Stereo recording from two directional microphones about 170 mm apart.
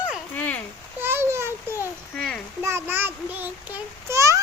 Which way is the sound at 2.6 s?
15° right (ahead or behind).